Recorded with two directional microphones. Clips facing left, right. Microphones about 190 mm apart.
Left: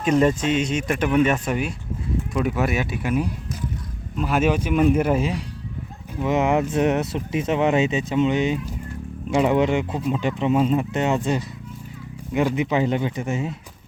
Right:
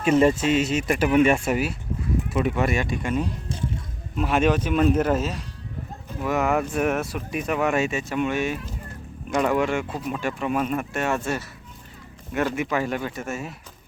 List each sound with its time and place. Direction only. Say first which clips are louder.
0.0 s speech: even; 5° right (ahead or behind); by 13.6 s 20° left (ahead or behind)